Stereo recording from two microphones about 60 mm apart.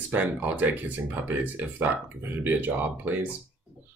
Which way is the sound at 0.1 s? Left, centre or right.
Right.